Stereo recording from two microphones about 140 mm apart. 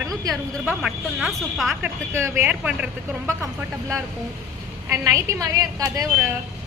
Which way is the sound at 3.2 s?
20° right (ahead or behind).